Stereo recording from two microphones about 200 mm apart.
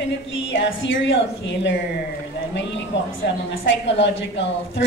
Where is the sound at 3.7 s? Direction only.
65° left (ahead or behind).